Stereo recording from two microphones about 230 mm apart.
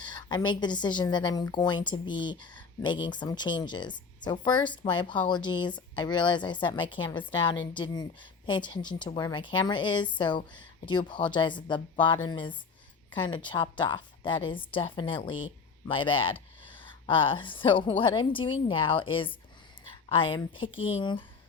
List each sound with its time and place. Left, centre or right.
0.0 s a woman's voice: centre